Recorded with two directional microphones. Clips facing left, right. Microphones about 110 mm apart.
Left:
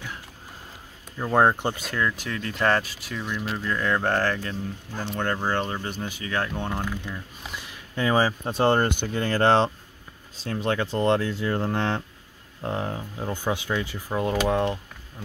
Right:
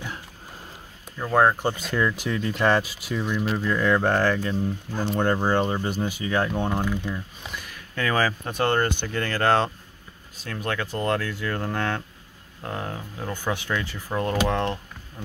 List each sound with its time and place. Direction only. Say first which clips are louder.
1.1 s speech: even; 15° left (ahead or behind)
1.6 s speech: right 2 dB; centre (ahead or behind)
7.5 s speech: left 1 dB; 20° left (ahead or behind)